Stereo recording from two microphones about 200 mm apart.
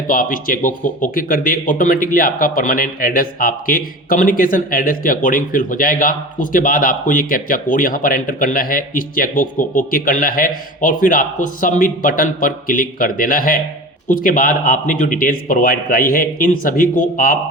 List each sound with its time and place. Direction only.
0.1 s speech: 45° left (ahead or behind)